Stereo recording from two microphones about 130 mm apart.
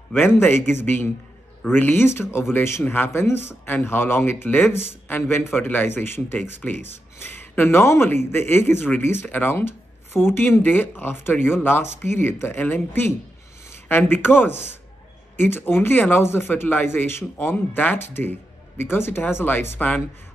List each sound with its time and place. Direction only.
0.1 s speech: 15° left (ahead or behind)